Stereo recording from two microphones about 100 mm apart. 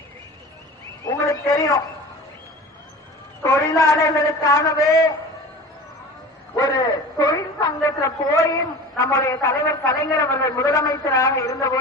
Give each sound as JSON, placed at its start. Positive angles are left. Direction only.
{"t": 1.0, "sound": "a man's voice", "side_deg": 35}
{"t": 3.4, "sound": "a man's voice", "side_deg": 35}
{"t": 6.6, "sound": "a woman's voice", "side_deg": 35}